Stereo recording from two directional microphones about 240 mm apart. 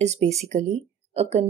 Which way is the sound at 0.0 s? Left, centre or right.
Right.